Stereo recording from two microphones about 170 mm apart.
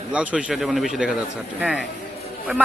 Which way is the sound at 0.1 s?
5° right (ahead or behind).